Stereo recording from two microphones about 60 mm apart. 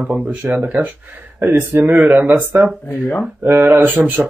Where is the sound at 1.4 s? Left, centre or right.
Right.